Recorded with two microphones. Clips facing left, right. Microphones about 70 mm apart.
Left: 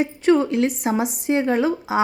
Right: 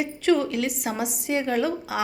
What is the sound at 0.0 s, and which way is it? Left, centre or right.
A woman's voice, left.